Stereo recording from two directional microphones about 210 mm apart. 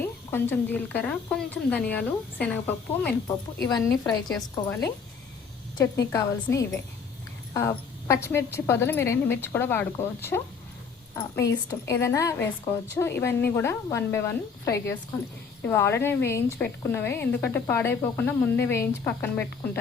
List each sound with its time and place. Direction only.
0.0 s a woman's voice: 10° left (ahead or behind)
3.2 s a woman's voice: 15° left (ahead or behind)